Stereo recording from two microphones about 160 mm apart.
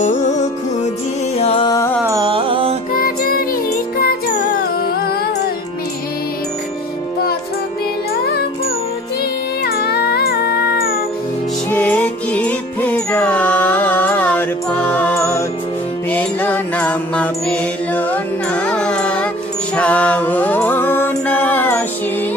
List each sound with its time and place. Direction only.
1.4 s music: 35° left (ahead or behind)
2.2 s music: 35° right (ahead or behind)
2.9 s music: 65° left (ahead or behind)
9.7 s music: 70° left (ahead or behind)
11.7 s music: 10° left (ahead or behind)